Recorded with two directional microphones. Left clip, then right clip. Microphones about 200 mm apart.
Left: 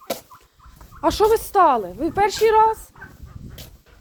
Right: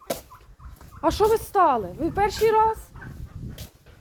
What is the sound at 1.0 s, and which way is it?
A woman's voice, 15° left (ahead or behind).